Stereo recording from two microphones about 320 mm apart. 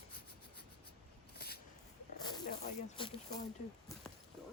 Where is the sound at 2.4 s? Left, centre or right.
Centre.